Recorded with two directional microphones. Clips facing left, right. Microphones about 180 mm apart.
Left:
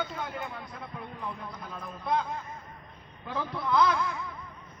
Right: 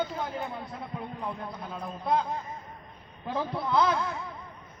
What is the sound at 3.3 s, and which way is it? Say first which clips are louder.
Speech: right 1 dB; 30° right (ahead or behind).